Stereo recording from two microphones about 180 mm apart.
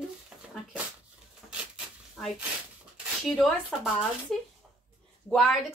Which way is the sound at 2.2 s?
Centre (ahead or behind).